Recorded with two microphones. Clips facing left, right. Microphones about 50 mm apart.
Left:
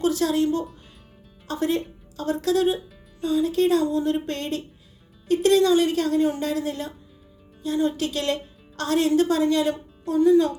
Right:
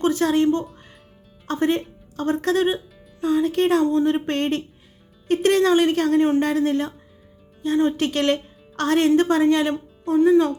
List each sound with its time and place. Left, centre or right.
0.0 s a woman's voice: right